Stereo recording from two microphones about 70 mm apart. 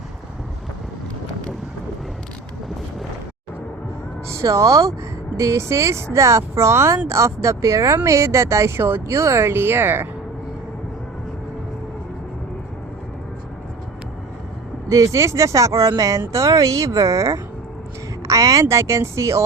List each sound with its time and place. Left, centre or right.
4.3 s speech: right
14.8 s speech: right